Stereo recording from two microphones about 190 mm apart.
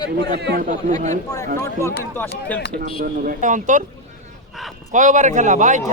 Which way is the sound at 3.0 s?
45° right (ahead or behind).